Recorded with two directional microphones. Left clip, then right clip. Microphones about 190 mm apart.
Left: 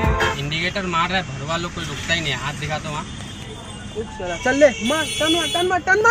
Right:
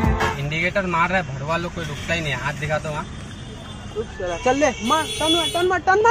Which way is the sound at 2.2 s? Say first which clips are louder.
Even; 35° right (ahead or behind).